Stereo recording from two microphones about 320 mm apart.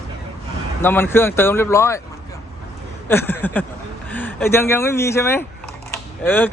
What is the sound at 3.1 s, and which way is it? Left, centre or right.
Speech, centre.